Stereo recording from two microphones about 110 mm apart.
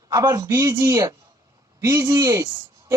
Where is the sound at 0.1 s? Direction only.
30° right (ahead or behind).